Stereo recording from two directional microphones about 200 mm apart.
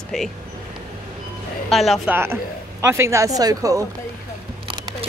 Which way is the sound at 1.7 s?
Centre (ahead or behind).